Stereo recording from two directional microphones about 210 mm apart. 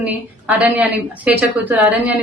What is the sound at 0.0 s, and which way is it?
A woman's voice, 5° right (ahead or behind).